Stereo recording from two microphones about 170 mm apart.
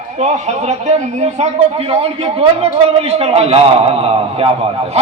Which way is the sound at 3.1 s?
35° right (ahead or behind).